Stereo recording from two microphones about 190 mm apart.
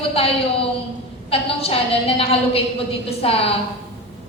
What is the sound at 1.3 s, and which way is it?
A woman's voice, 30° left (ahead or behind).